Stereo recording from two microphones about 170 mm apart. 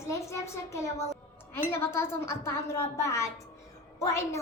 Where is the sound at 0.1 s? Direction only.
15° left (ahead or behind).